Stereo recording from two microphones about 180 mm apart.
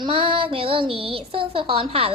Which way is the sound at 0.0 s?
30° right (ahead or behind).